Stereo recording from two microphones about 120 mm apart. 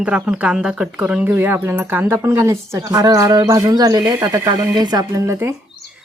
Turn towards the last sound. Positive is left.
turn(degrees=-25)  # may be behind; listen again after turning